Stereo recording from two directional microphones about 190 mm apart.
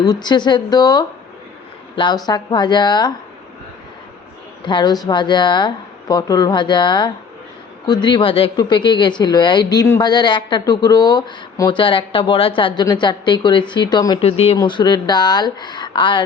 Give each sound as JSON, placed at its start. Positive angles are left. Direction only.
{"t": 0.0, "sound": "a woman's voice", "side_deg": 20}
{"t": 4.6, "sound": "a woman's voice", "side_deg": 25}